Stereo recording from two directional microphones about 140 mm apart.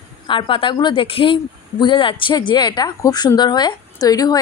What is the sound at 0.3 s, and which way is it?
A woman's voice, 35° left (ahead or behind).